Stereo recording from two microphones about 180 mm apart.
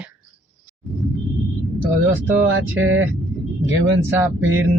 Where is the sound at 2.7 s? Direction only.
90° right.